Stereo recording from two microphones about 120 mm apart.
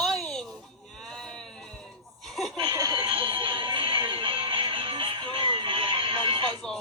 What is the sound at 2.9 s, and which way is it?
Music, 50° right (ahead or behind).